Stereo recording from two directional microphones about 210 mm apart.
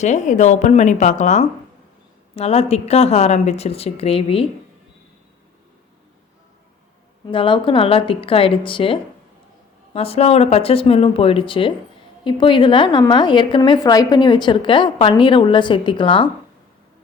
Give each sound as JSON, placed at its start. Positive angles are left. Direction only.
{"t": 0.0, "sound": "a woman's voice", "side_deg": 35}
{"t": 7.3, "sound": "a woman's voice", "side_deg": 25}